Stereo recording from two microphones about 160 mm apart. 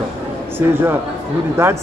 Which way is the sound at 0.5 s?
15° right (ahead or behind).